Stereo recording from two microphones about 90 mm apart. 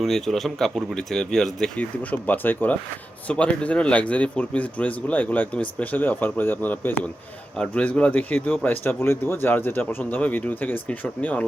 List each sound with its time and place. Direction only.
0.0 s speech: centre (ahead or behind)
1.8 s speech: 20° left (ahead or behind)